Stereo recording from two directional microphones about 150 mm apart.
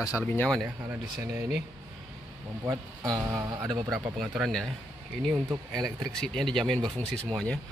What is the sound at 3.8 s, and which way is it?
Speech, 5° right (ahead or behind).